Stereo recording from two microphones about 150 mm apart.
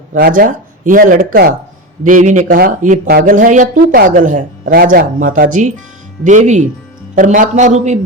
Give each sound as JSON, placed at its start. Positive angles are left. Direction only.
{"t": 0.1, "sound": "a man's voice", "side_deg": -65}